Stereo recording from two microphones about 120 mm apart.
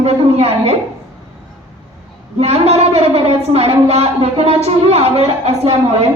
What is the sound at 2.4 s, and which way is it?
A woman's voice, 60° right (ahead or behind).